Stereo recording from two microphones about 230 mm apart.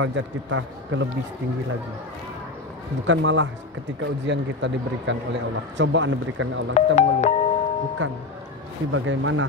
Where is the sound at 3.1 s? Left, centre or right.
Right.